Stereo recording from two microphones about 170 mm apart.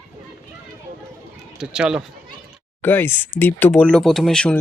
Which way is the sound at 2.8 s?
10° left (ahead or behind).